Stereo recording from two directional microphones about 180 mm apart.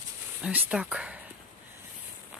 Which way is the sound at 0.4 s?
5° right (ahead or behind).